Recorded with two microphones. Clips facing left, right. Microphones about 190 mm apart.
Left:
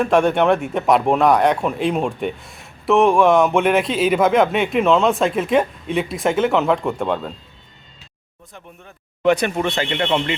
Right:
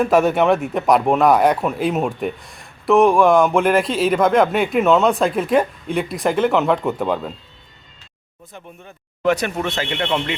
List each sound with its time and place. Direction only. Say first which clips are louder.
0.0 s a man's voice: even; 5° right (ahead or behind)
9.2 s a man's voice: left 2 dB; centre (ahead or behind)